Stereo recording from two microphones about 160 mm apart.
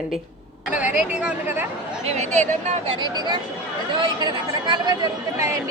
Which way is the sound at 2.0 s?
45° right (ahead or behind).